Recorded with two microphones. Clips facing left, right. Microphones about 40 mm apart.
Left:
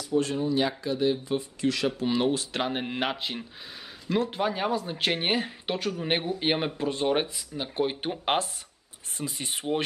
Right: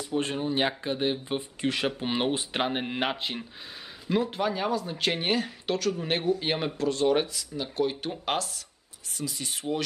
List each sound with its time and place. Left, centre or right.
0.0 s speech: right
2.7 s speech: centre
4.3 s speech: centre; by 9.8 s left